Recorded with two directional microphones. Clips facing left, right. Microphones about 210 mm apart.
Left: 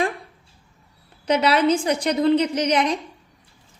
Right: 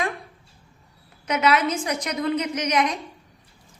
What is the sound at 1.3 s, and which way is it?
A woman's voice, 30° left (ahead or behind).